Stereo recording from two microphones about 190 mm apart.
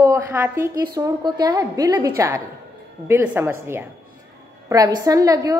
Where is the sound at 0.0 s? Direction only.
15° right (ahead or behind).